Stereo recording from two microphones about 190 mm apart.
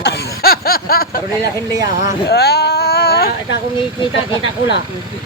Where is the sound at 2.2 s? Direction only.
55° left (ahead or behind).